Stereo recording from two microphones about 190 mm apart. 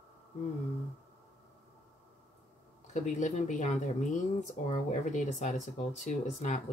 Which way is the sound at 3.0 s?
40° left (ahead or behind).